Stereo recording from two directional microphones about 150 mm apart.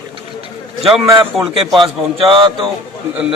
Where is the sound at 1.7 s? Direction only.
35° right (ahead or behind).